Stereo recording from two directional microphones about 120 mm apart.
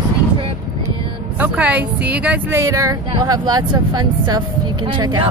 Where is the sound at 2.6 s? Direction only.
30° right (ahead or behind).